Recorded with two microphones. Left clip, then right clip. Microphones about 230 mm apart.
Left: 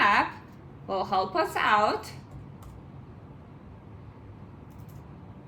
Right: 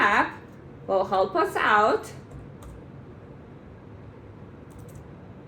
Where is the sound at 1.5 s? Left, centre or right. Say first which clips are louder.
Right 2 dB; centre.